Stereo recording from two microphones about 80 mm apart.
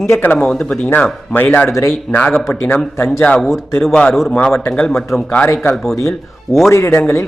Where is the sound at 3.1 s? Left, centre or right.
Centre.